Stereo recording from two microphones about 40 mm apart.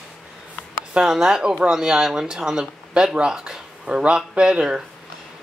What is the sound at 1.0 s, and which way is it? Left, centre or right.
Speech, centre.